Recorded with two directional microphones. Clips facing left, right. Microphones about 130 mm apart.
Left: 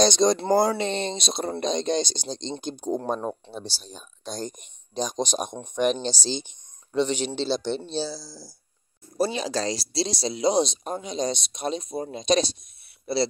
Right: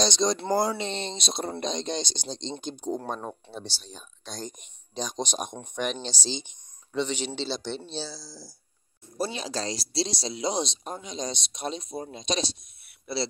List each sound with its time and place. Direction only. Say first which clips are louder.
0.0 s speech: left 5 dB; 55° left (ahead or behind)
3.1 s speech: left 6 dB; 30° left (ahead or behind)
4.3 s speech: left 5 dB; 45° left (ahead or behind)
7.0 s speech: left 5 dB; 40° left (ahead or behind)
8.1 s speech: left 6 dB; 5° left (ahead or behind)
9.2 s speech: left 5 dB; 70° left (ahead or behind); by 13.3 s 45° left (ahead or behind)